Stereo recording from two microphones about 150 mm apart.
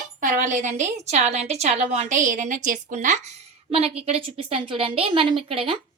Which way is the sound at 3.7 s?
40° right (ahead or behind).